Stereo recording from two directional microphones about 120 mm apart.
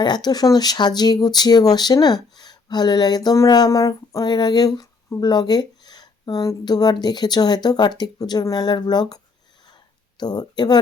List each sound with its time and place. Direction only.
0.0 s speech: 35° left (ahead or behind)